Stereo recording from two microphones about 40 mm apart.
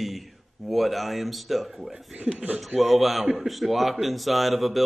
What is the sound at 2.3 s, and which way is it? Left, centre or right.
Speech, right.